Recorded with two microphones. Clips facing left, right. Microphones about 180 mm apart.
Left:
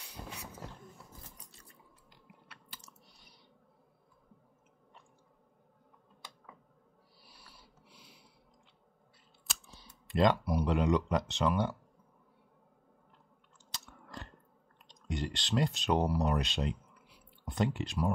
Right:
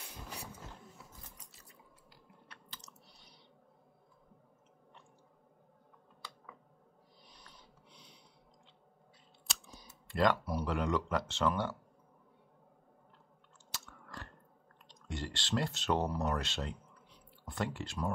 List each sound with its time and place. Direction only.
7.2 s a sound: 5° left (ahead or behind)
10.0 s speech: 20° left (ahead or behind)
13.7 s biting: 20° left (ahead or behind)
14.9 s speech: 15° left (ahead or behind)